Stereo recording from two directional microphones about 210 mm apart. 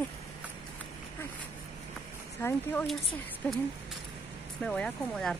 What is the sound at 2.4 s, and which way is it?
A woman's voice, 10° left (ahead or behind).